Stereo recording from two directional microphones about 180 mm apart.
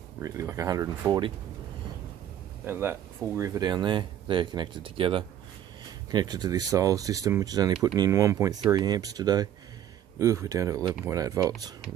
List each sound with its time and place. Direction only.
0.2 s speech: 15° right (ahead or behind)
2.6 s speech: 10° right (ahead or behind)